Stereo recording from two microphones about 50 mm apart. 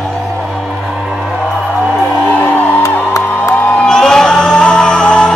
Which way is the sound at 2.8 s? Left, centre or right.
Left.